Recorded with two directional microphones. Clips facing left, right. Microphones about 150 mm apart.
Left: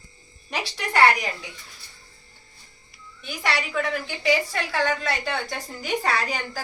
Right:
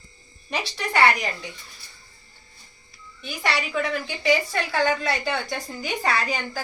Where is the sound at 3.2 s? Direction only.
Centre (ahead or behind).